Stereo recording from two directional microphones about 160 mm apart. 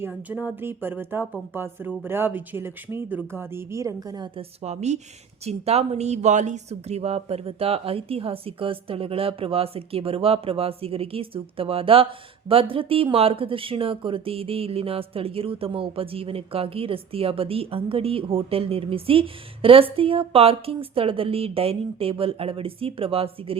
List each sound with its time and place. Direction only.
0.0 s speech: 10° right (ahead or behind); by 4.4 s 25° right (ahead or behind)
4.6 s speech: 45° right (ahead or behind)